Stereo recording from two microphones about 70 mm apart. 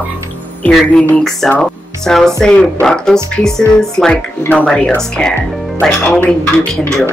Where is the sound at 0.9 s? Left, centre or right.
Centre.